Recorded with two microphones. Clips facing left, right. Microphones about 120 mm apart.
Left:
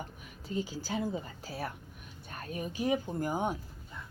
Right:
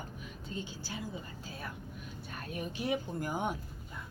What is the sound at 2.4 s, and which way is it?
Speech, 40° left (ahead or behind).